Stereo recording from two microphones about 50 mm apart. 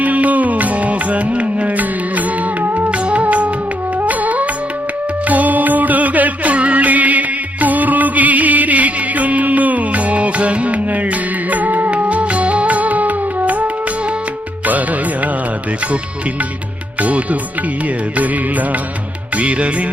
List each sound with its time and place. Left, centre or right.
0.0 s music: right
2.9 s music: right
14.7 s music: right
17.0 s music: right